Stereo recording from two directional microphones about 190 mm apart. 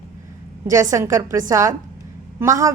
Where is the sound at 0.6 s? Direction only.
15° right (ahead or behind).